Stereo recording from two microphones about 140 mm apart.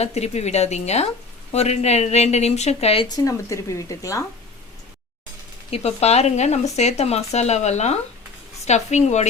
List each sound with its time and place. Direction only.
0.0 s speech: 50° left (ahead or behind)
3.2 s speech: 25° left (ahead or behind)
5.7 s a woman's voice: 50° left (ahead or behind)